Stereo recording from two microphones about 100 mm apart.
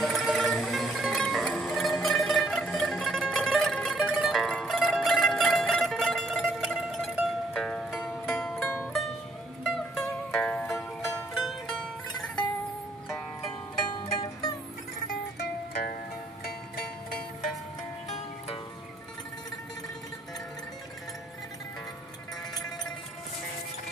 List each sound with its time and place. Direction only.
0.0 s music: centre (ahead or behind)
13.7 s music: 45° left (ahead or behind)